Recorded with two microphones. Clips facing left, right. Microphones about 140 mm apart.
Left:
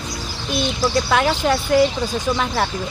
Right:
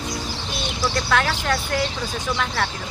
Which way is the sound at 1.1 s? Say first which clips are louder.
Left 3 dB; 15° left (ahead or behind).